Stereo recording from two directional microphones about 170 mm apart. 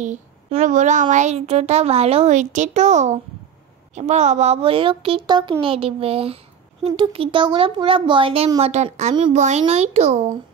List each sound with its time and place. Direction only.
0.0 s a child's voice: 40° right (ahead or behind)